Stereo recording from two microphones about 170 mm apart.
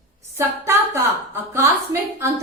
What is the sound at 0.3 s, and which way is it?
A woman's voice, 15° right (ahead or behind).